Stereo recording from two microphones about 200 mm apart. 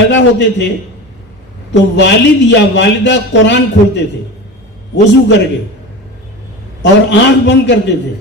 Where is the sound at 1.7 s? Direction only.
60° left (ahead or behind).